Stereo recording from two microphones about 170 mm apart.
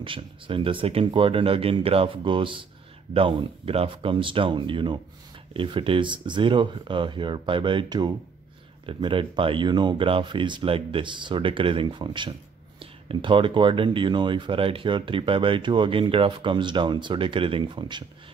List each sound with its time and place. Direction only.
0.0 s speech: 30° right (ahead or behind)